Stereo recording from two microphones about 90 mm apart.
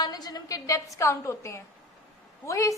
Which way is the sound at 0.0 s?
45° left (ahead or behind).